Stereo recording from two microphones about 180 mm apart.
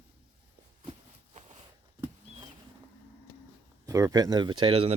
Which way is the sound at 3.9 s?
15° right (ahead or behind).